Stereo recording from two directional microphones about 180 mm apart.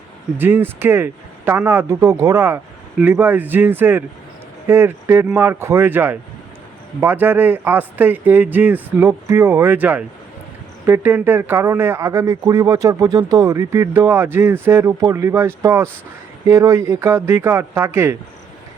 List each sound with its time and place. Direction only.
0.3 s a man's voice: 10° right (ahead or behind)